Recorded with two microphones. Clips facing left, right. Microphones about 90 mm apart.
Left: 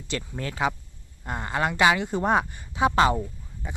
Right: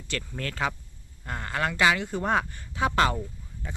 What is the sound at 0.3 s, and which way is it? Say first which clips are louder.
Speech: left 3 dB; 15° left (ahead or behind).